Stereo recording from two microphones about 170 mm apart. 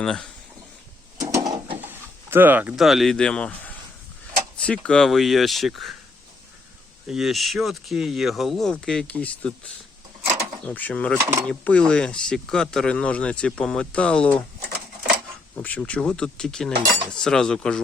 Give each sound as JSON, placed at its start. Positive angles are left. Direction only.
{"t": 0.0, "sound": "speech", "side_deg": 5}
{"t": 1.2, "sound": "a sound", "side_deg": -20}
{"t": 1.8, "sound": "speech", "side_deg": -10}
{"t": 4.5, "sound": "speech", "side_deg": 5}
{"t": 7.1, "sound": "speech", "side_deg": 0}
{"t": 10.7, "sound": "speech", "side_deg": 10}
{"t": 15.5, "sound": "speech", "side_deg": 10}